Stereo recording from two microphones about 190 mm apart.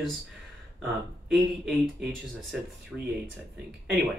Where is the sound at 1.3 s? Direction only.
Centre (ahead or behind).